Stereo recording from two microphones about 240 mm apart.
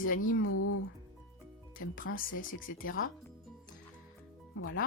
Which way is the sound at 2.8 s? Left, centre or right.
Left.